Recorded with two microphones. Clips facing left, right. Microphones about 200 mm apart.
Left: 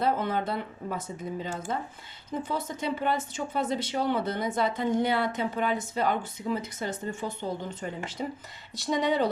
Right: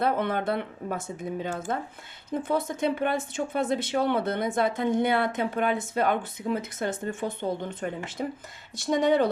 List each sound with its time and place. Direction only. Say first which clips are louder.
0.0 s speech: right 2 dB; 60° right (ahead or behind)